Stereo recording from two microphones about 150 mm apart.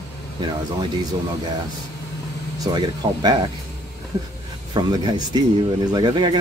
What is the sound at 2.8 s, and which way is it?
Speech, 25° right (ahead or behind).